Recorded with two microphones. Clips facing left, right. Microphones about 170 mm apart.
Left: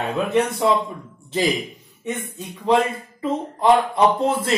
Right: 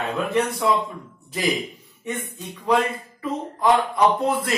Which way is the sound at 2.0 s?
25° left (ahead or behind).